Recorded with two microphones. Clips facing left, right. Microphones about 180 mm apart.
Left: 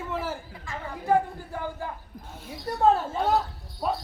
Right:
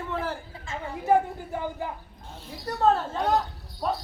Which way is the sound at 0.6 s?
25° right (ahead or behind).